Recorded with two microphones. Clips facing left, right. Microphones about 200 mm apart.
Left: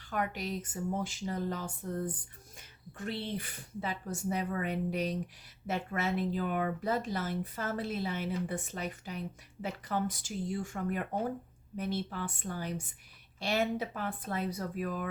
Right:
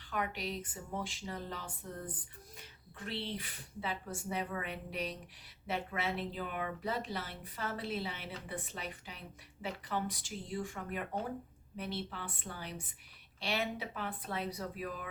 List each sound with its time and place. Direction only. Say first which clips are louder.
0.1 s speech: left 3 dB; 45° left (ahead or behind)